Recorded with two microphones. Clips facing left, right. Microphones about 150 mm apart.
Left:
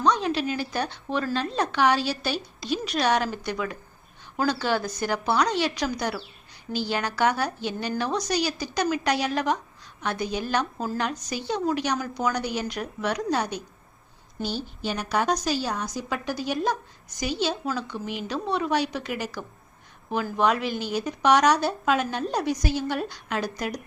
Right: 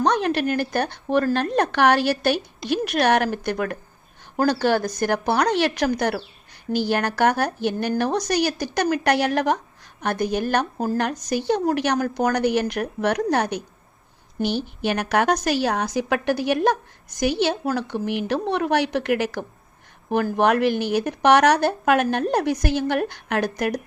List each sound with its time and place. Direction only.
0.0 s a woman's voice: 60° right (ahead or behind)